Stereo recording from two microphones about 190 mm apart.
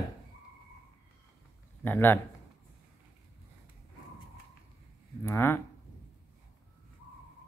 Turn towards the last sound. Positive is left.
turn(degrees=10)  # may be behind; listen again after turning